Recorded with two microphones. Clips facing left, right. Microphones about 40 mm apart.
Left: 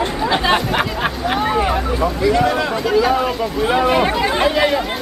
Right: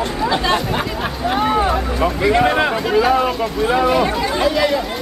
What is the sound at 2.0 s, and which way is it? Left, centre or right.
Speech, right.